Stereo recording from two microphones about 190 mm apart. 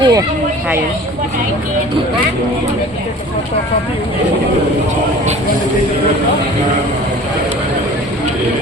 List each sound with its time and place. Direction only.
0.0 s speech: 20° right (ahead or behind)